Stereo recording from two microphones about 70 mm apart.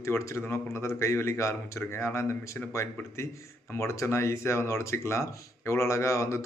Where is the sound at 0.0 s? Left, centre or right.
Left.